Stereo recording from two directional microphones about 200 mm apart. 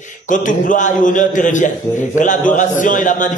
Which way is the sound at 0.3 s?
40° left (ahead or behind).